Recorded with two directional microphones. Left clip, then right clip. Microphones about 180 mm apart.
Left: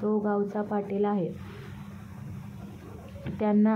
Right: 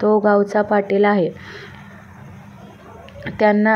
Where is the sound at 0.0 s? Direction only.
35° right (ahead or behind).